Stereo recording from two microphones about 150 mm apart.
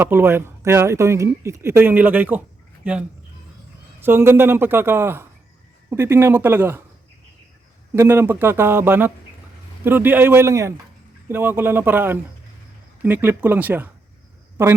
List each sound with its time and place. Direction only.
0.0 s speech: 15° right (ahead or behind)
4.0 s speech: 15° right (ahead or behind)
7.9 s speech: 15° right (ahead or behind)